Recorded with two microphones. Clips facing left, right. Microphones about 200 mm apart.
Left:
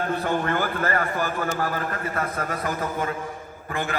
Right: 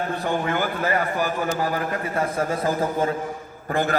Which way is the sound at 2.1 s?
30° right (ahead or behind).